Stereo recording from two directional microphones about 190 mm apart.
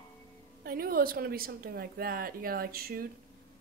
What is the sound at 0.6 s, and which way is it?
Speech, 50° right (ahead or behind).